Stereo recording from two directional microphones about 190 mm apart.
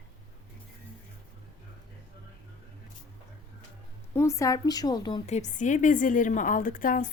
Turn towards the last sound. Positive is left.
turn(degrees=45)  # may be behind; listen again after turning